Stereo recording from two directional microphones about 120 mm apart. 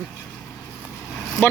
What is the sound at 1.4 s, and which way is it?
Speech, 15° left (ahead or behind).